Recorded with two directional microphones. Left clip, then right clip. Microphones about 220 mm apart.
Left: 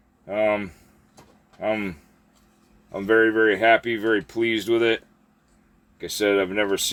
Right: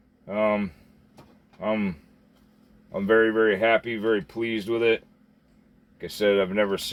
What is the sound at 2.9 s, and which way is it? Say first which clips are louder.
Speech: left 2 dB; 45° left (ahead or behind).